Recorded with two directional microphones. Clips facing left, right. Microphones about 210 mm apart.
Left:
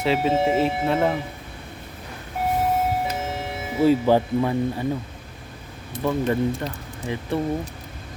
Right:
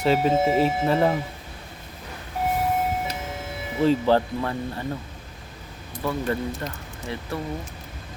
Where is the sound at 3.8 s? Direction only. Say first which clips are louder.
Left 2 dB; 15° left (ahead or behind).